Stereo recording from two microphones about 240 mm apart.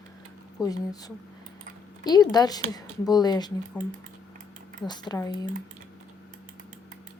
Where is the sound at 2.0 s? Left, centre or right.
Centre.